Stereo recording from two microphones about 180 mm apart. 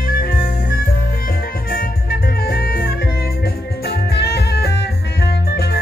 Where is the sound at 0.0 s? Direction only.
55° left (ahead or behind).